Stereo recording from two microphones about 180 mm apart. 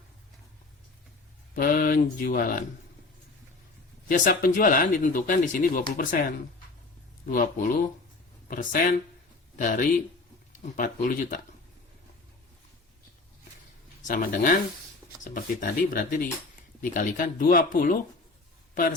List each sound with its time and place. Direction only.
1.5 s speech: 50° left (ahead or behind)
4.1 s speech: 50° left (ahead or behind)
14.1 s speech: 50° left (ahead or behind)